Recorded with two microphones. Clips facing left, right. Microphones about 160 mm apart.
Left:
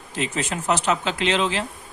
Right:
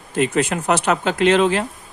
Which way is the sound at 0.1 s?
55° right (ahead or behind).